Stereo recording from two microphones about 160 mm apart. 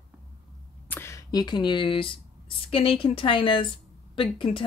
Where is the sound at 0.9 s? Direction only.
15° left (ahead or behind); by 4.6 s 35° left (ahead or behind).